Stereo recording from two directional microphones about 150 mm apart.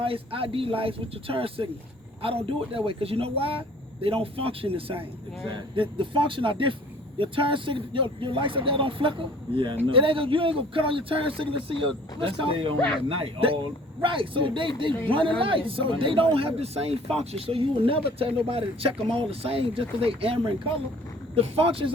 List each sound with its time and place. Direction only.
0.0 s speech: 35° right (ahead or behind)